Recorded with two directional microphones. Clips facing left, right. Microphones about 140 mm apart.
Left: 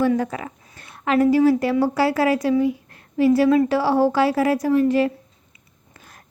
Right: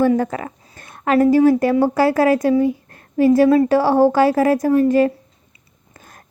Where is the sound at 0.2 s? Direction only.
45° right (ahead or behind).